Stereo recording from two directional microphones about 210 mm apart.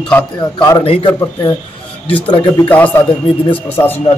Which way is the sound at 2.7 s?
5° left (ahead or behind).